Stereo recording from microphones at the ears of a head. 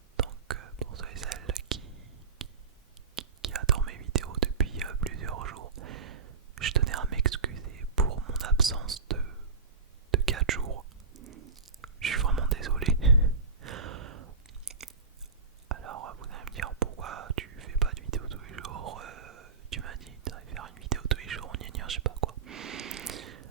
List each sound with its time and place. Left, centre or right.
0.2 s whispering: right